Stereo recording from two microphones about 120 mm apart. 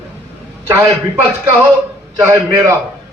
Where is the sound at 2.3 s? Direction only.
25° right (ahead or behind).